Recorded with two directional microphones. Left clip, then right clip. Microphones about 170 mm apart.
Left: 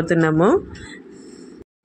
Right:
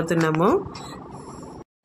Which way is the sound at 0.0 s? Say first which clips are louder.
Left 4 dB; 20° left (ahead or behind).